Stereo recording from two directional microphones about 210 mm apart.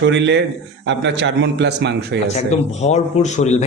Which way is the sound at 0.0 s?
55° right (ahead or behind).